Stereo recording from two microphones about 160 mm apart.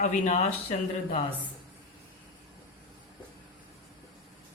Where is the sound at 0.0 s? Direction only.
45° left (ahead or behind).